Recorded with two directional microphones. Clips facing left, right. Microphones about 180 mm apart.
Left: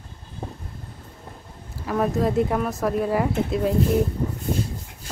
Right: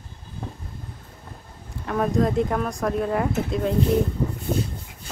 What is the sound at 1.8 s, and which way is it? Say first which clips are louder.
Speech: even; centre (ahead or behind).